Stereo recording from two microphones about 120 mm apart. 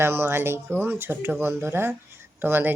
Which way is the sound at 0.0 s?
20° right (ahead or behind).